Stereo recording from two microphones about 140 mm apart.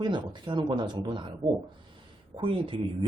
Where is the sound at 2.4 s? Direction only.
35° right (ahead or behind).